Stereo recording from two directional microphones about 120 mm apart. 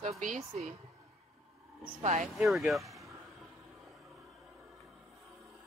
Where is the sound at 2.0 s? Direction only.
70° right (ahead or behind).